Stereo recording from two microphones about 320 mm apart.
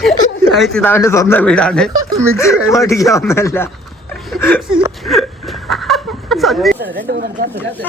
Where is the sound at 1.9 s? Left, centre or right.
Centre.